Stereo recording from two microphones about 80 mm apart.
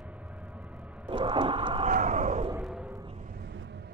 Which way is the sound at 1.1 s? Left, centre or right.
Right.